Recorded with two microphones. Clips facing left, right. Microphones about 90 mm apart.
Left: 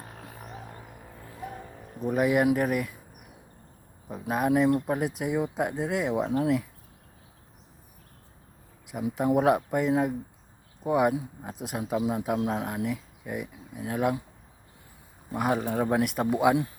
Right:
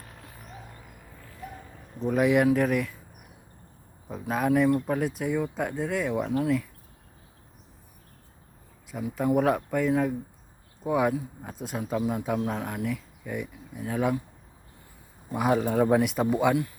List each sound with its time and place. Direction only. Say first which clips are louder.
2.0 s speech: right 1 dB; 5° left (ahead or behind)
4.1 s speech: even; 10° left (ahead or behind)
8.9 s speech: even; 15° left (ahead or behind)
15.3 s speech: right 2 dB; 5° left (ahead or behind)